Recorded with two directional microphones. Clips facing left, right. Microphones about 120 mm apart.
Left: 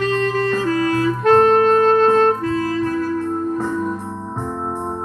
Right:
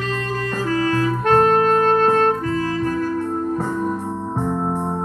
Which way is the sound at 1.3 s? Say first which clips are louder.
Left 3 dB; 30° left (ahead or behind).